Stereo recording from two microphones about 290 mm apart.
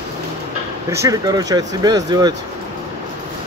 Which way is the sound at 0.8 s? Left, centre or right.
Centre.